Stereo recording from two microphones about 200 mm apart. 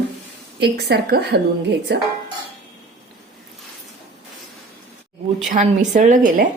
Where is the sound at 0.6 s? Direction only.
55° right (ahead or behind).